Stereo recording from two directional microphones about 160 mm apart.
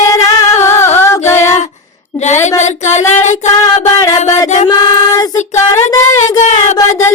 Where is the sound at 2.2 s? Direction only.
45° left (ahead or behind).